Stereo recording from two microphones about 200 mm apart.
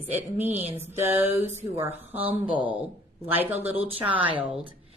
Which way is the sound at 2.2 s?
25° right (ahead or behind).